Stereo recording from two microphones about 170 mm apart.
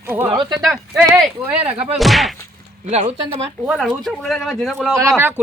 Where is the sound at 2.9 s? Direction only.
40° right (ahead or behind).